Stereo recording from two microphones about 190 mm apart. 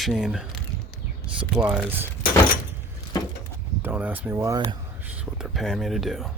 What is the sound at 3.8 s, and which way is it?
Speech, 10° right (ahead or behind).